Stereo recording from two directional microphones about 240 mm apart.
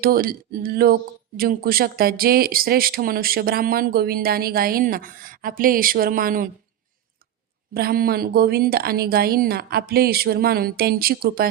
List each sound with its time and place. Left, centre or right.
0.0 s speech: right
7.7 s speech: right